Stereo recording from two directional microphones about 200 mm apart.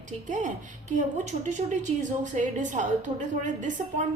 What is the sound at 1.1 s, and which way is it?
A woman's voice, 40° right (ahead or behind).